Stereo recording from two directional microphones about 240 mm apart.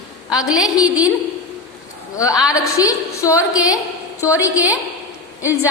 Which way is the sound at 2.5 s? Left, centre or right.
Centre.